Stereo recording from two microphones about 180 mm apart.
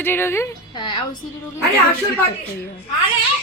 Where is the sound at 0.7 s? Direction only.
25° left (ahead or behind).